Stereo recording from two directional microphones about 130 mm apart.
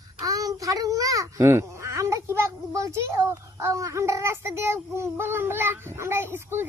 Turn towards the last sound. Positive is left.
turn(degrees=-20)  # may be behind; listen again after turning